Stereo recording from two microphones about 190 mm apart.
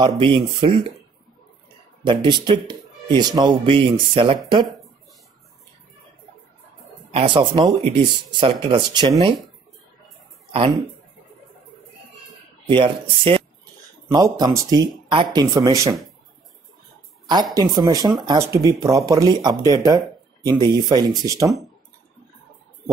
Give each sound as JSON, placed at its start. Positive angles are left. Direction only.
{"t": 0.0, "sound": "speech", "side_deg": -25}
{"t": 2.0, "sound": "speech", "side_deg": -25}
{"t": 7.1, "sound": "speech", "side_deg": -30}
{"t": 12.6, "sound": "speech", "side_deg": -25}
{"t": 17.7, "sound": "speech", "side_deg": -20}